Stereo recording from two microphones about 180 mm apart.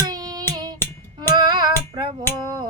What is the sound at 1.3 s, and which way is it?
Female singing, 25° right (ahead or behind).